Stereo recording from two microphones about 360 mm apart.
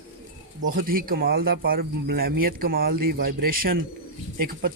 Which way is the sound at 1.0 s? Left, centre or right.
Right.